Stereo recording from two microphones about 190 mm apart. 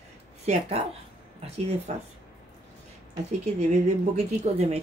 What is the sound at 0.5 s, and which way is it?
Speech, 30° right (ahead or behind).